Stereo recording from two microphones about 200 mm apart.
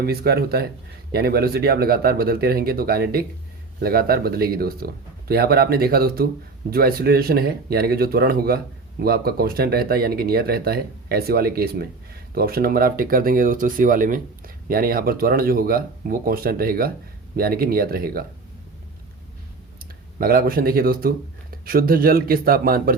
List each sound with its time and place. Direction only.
0.0 s speech: 50° right (ahead or behind)
20.1 s speech: 50° right (ahead or behind)